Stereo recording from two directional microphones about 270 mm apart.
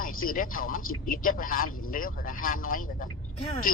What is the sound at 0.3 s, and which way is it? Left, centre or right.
Speech, left.